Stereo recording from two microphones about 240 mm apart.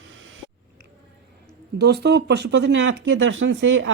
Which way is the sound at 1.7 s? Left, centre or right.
Right.